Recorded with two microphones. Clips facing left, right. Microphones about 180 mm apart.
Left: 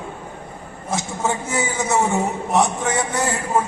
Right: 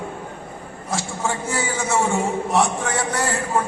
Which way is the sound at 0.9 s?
20° left (ahead or behind).